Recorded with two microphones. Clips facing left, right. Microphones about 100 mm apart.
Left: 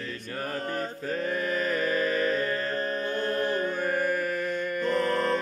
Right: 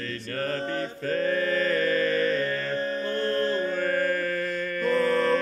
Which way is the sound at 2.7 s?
40° left (ahead or behind).